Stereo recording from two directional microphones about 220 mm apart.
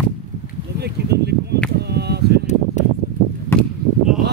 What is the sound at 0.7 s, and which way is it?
Speech, 50° right (ahead or behind).